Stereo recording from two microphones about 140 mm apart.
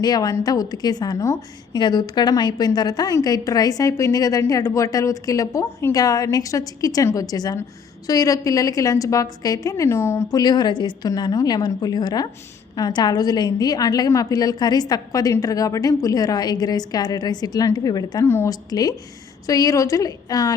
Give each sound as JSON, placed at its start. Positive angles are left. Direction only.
{"t": 0.0, "sound": "a woman's voice", "side_deg": 30}